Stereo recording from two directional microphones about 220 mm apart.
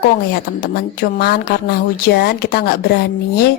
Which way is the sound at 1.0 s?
45° left (ahead or behind).